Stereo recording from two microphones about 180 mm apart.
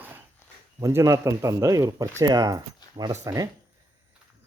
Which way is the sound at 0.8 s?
15° right (ahead or behind).